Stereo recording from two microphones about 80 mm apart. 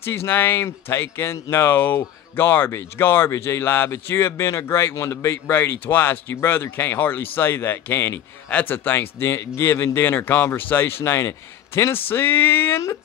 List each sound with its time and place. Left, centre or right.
0.0 s speech: left
8.5 s speech: centre
8.7 s speech: left